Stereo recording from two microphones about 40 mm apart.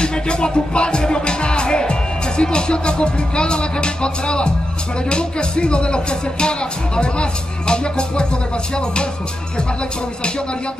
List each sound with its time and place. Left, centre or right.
0.0 s music: left
5.1 s speech: left